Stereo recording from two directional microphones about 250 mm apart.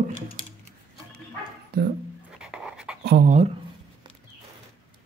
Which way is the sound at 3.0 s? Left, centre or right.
Right.